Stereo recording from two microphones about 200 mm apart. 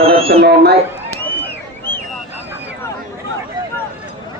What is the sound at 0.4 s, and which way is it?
Speech, 55° right (ahead or behind).